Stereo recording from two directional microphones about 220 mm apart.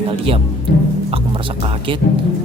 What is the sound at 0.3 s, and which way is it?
Speech, 25° right (ahead or behind).